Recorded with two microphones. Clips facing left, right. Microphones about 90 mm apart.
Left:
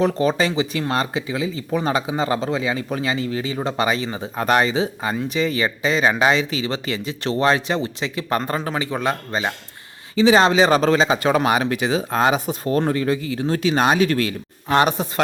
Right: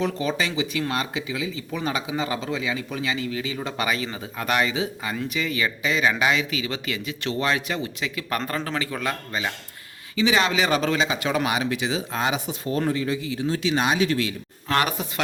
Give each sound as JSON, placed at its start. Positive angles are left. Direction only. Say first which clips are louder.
{"t": 0.0, "sound": "speech", "louder": "left 6 dB", "side_deg": 40}
{"t": 14.7, "sound": "speech", "louder": "left 6 dB", "side_deg": 25}